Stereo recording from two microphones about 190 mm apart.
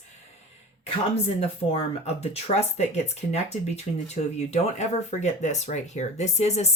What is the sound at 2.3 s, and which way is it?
Speech, 35° left (ahead or behind).